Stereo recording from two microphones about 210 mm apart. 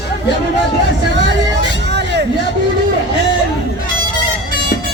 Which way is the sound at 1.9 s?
55° right (ahead or behind).